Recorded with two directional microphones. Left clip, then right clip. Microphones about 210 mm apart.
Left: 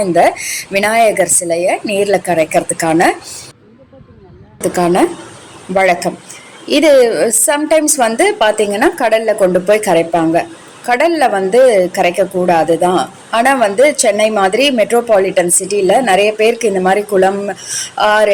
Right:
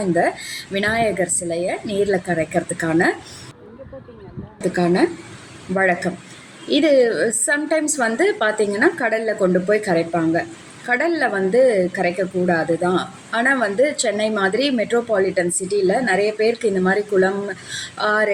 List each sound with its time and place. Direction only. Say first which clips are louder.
0.1 s a woman's voice: left 7 dB; centre (ahead or behind)
4.6 s a woman's voice: left 6 dB; 5° left (ahead or behind)